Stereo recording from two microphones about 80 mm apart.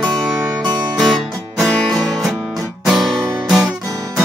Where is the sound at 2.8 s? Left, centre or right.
Centre.